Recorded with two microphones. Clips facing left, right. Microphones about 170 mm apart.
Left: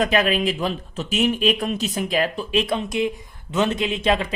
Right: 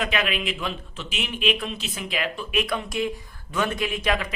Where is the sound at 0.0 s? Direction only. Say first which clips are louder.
Left 7 dB; 40° left (ahead or behind).